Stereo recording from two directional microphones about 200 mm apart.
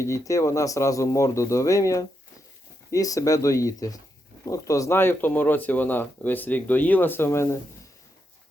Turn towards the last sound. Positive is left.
turn(degrees=15)  # may be behind; listen again after turning